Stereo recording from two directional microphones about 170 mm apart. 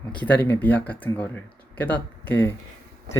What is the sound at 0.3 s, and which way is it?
Speech, 10° left (ahead or behind).